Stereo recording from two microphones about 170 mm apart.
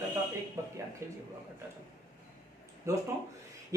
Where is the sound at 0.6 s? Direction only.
20° right (ahead or behind).